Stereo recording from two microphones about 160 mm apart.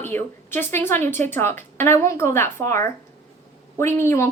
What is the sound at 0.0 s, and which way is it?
A woman's voice, 15° left (ahead or behind).